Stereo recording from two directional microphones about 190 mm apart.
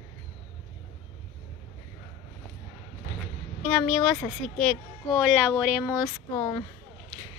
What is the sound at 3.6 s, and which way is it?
Speech, 5° left (ahead or behind).